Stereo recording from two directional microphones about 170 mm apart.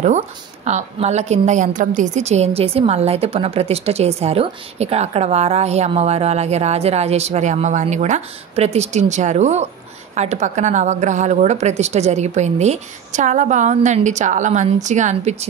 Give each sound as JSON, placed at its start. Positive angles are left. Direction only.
{"t": 0.7, "sound": "a woman's voice", "side_deg": -40}